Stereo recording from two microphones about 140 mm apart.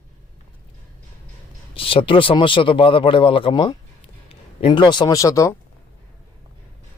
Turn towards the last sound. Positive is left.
turn(degrees=20)  # may be behind; listen again after turning